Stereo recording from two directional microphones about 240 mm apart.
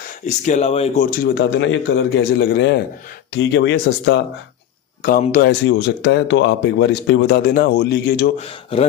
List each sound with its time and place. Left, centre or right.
0.3 s speech: left
1.1 s speech: left
5.0 s speech: left
8.4 s speech: left